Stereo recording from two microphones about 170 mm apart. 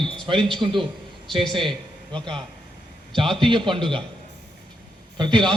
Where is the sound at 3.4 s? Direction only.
30° right (ahead or behind).